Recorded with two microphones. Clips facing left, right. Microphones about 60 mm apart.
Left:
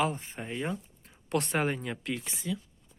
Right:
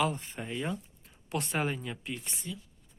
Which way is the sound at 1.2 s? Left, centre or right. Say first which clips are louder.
Left 3 dB; left.